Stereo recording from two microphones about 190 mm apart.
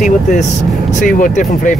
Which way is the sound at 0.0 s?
40° left (ahead or behind).